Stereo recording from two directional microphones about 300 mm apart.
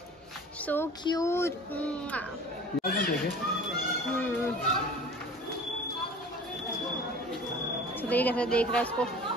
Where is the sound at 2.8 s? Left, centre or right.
Left.